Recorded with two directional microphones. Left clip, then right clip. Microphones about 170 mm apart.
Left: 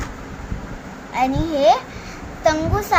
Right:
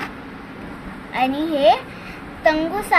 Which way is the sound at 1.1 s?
Centre (ahead or behind).